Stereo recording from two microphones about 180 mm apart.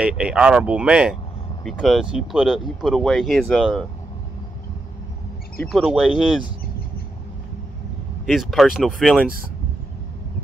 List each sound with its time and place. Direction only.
0.0 s speech: 5° right (ahead or behind)
5.6 s speech: centre (ahead or behind)
8.3 s speech: centre (ahead or behind)